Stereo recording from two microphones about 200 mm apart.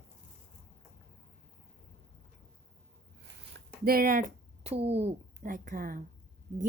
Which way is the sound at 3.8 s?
45° right (ahead or behind).